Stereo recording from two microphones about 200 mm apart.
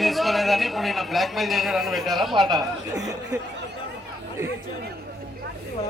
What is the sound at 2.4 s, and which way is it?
Speech, 20° right (ahead or behind).